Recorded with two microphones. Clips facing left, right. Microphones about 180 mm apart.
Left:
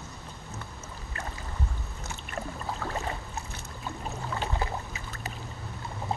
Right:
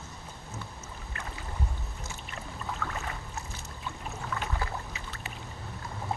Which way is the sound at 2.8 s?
30° left (ahead or behind).